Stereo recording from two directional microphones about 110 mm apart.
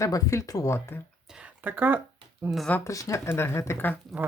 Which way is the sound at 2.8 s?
30° left (ahead or behind).